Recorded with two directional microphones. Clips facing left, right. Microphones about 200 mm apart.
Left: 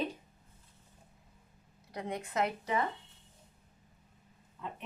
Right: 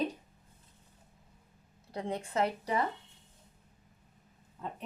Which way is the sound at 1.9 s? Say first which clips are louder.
Right 2 dB; 30° right (ahead or behind).